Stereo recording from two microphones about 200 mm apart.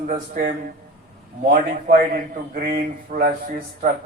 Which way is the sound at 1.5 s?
45° right (ahead or behind).